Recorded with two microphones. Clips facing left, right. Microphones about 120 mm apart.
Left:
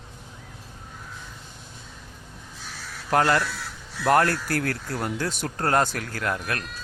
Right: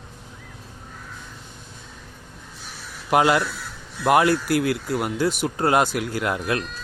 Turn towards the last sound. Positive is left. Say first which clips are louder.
# right 4 dB
turn(degrees=-20)  # may be behind; listen again after turning